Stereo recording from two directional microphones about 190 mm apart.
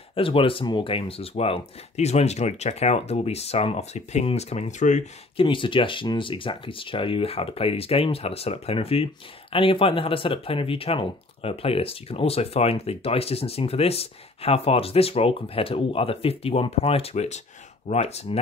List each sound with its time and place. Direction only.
0.1 s speech: 30° left (ahead or behind)
5.4 s speech: 25° left (ahead or behind)